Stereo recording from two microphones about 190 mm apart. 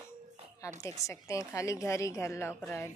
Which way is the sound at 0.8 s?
15° left (ahead or behind).